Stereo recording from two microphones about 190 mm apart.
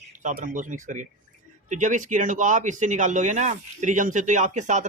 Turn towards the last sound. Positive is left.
turn(degrees=-40)  # may be behind; listen again after turning